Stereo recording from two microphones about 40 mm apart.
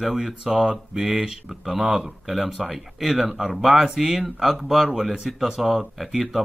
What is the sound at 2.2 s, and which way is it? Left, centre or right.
Speech, centre.